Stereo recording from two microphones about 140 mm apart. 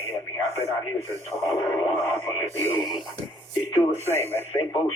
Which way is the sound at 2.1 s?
20° left (ahead or behind).